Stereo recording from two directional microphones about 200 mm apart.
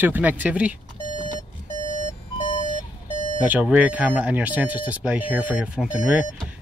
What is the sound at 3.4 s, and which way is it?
Speech, 5° right (ahead or behind).